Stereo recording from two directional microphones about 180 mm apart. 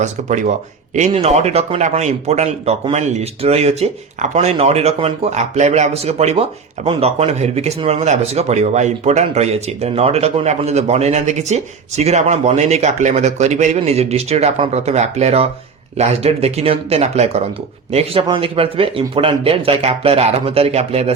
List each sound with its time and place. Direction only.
0.0 s speech: 40° right (ahead or behind)